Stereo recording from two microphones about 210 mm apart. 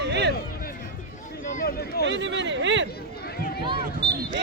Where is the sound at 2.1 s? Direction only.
60° right (ahead or behind).